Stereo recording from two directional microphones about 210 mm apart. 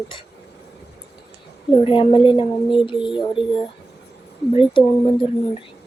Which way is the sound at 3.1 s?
5° right (ahead or behind).